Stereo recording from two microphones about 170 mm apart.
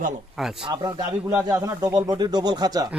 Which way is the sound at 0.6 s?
25° right (ahead or behind).